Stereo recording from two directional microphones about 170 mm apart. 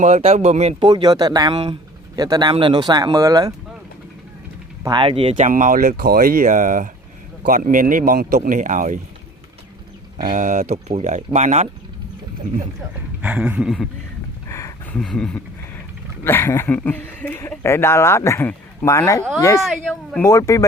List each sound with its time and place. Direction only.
0.0 s speech: 40° right (ahead or behind)
0.9 s speech: 25° right (ahead or behind)
4.8 s speech: 25° right (ahead or behind)
5.4 s speech: 50° right (ahead or behind)
8.4 s speech: 45° right (ahead or behind)
10.3 s speech: 50° right (ahead or behind)
10.8 s speech: 40° right (ahead or behind)
13.2 s speech: 5° right (ahead or behind)
14.4 s a sound: 15° left (ahead or behind)
14.9 s speech: 5° left (ahead or behind)
19.6 s speech: 5° left (ahead or behind)
20.2 s speech: 20° left (ahead or behind)